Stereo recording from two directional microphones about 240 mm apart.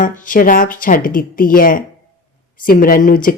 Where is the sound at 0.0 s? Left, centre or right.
Left.